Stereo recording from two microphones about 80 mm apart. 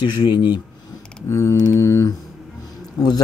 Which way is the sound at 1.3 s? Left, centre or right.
Left.